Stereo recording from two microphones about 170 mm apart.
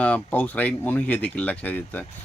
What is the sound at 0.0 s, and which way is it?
Speech, 10° left (ahead or behind).